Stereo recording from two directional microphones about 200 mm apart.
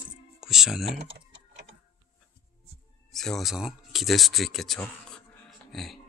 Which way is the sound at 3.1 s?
Centre (ahead or behind).